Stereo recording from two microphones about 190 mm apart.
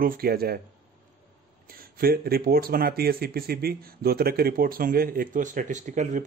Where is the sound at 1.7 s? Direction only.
50° right (ahead or behind).